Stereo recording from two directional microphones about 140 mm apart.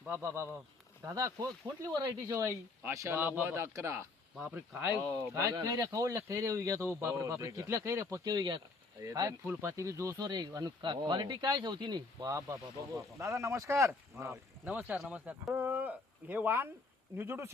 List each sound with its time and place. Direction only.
0.1 s speech: 20° right (ahead or behind)
14.7 s speech: 10° right (ahead or behind)